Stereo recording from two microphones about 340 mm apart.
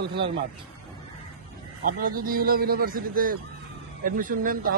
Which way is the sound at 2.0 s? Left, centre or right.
Right.